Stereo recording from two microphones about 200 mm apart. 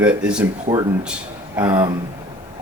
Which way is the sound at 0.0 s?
5° right (ahead or behind).